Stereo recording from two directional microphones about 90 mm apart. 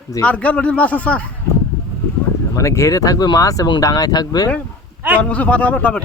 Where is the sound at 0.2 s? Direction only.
15° left (ahead or behind).